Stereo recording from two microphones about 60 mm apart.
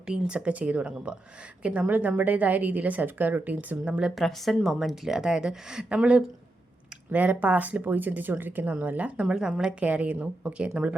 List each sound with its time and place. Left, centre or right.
0.0 s a woman's voice: centre
4.1 s a woman's voice: centre; by 9.3 s right
9.3 s a woman's voice: centre
9.8 s a woman's voice: right